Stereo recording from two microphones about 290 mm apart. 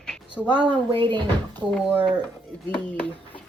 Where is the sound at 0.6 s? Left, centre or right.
Centre.